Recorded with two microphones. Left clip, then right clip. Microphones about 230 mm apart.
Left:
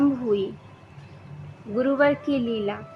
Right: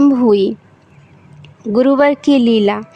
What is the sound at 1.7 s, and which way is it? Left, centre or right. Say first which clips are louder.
A woman's voice: right 9 dB; right.